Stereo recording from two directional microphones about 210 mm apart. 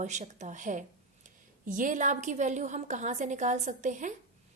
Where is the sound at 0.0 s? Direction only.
35° right (ahead or behind).